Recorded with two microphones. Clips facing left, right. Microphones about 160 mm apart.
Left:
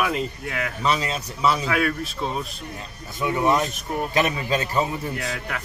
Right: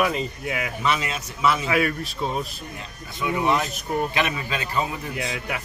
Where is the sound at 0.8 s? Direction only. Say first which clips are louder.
Left 3 dB; 35° left (ahead or behind).